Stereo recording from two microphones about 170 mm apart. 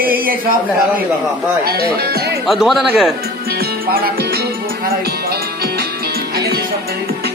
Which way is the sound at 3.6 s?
60° right (ahead or behind).